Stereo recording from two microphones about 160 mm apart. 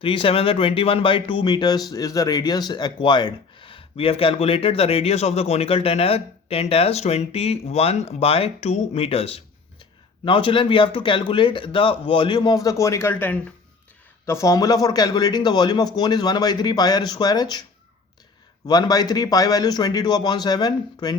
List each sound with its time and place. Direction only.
0.0 s speech: 35° left (ahead or behind)
18.6 s speech: 25° left (ahead or behind)